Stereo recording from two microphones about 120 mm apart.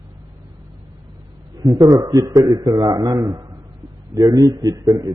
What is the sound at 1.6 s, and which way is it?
A man's voice, 30° right (ahead or behind).